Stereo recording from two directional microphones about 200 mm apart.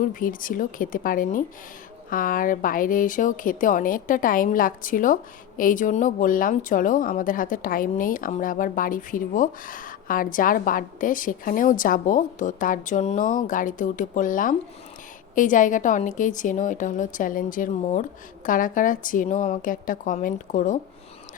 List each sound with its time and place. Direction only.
0.0 s a woman's voice: 45° left (ahead or behind)